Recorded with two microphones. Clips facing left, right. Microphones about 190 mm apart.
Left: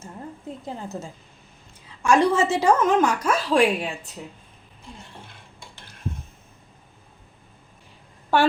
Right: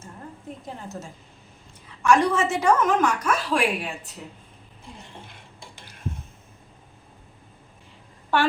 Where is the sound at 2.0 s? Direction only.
25° left (ahead or behind).